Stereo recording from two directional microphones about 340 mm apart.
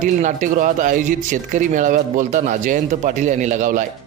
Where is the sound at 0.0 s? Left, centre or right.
Right.